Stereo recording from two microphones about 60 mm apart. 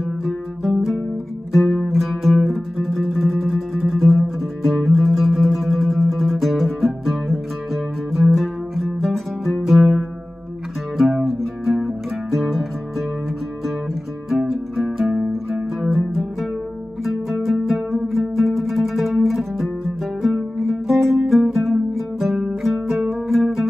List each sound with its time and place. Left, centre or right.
0.2 s music: centre
1.5 s music: centre
11.2 s music: centre
14.3 s music: centre
15.0 s music: right
15.8 s music: centre